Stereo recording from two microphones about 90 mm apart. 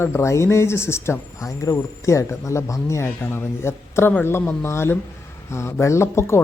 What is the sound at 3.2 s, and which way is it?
Speech, 20° left (ahead or behind).